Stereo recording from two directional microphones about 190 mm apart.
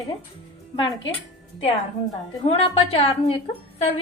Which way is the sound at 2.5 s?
30° left (ahead or behind).